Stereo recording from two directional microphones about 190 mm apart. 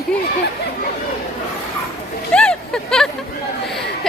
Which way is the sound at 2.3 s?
5° left (ahead or behind).